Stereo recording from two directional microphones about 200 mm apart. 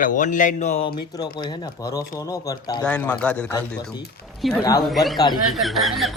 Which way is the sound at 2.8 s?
5° left (ahead or behind).